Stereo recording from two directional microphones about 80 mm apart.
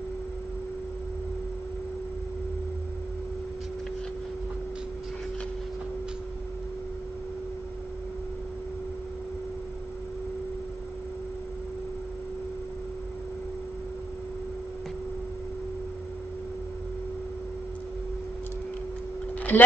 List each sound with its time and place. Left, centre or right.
19.5 s speech: left